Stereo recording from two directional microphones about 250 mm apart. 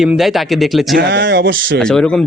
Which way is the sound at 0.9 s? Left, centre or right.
Right.